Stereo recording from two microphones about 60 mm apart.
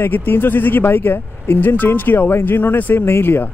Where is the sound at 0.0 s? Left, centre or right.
Left.